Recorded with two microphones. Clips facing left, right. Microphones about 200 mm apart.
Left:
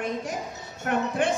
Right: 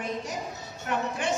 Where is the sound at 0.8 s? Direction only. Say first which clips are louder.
Left 5 dB; 55° left (ahead or behind).